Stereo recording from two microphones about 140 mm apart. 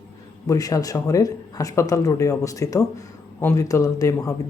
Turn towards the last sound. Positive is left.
turn(degrees=20)  # may be behind; listen again after turning